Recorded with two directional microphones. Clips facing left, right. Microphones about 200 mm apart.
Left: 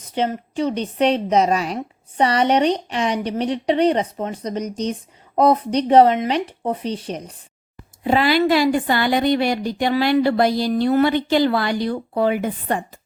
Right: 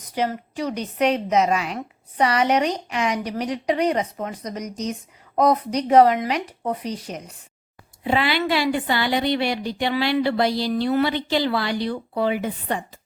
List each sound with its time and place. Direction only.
0.0 s a woman's voice: 25° left (ahead or behind)
8.0 s a woman's voice: 40° left (ahead or behind)